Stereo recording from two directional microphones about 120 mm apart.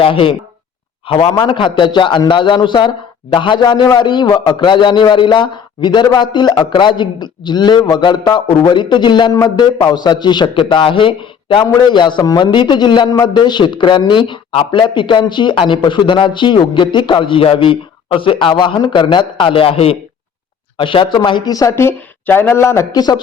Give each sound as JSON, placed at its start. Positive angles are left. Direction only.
{"t": 0.0, "sound": "a man's voice", "side_deg": 50}